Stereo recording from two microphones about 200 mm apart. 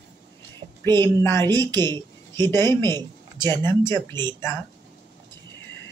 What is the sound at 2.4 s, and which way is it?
Speech, 15° left (ahead or behind).